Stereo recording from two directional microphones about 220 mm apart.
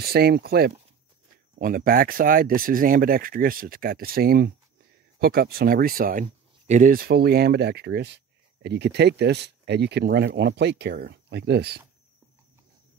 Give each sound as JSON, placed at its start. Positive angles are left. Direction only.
{"t": 0.0, "sound": "speech", "side_deg": -45}